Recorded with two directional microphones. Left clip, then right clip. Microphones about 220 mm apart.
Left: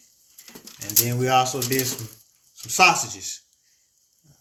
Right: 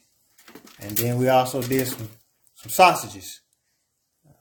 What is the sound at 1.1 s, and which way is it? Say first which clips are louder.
Speech: right 2 dB; 40° right (ahead or behind).